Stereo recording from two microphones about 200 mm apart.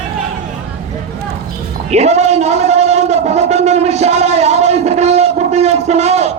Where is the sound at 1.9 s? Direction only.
35° right (ahead or behind).